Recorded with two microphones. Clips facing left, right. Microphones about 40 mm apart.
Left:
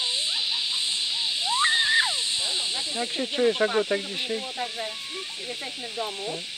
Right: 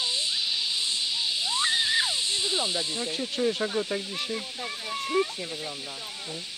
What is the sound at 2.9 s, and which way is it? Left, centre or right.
Speech, centre.